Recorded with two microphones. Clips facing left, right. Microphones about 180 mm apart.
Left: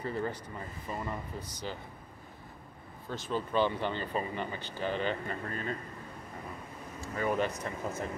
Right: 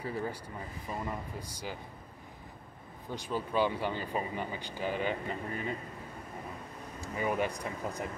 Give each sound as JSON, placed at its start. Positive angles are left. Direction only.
{"t": 0.0, "sound": "speech", "side_deg": -10}
{"t": 3.1, "sound": "speech", "side_deg": -15}
{"t": 7.0, "sound": "speech", "side_deg": -15}